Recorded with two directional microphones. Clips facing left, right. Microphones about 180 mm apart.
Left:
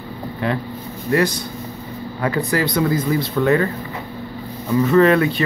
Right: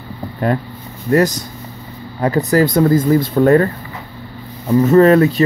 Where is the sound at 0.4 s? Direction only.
45° right (ahead or behind).